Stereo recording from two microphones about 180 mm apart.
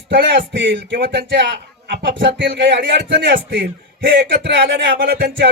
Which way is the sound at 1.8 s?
80° right.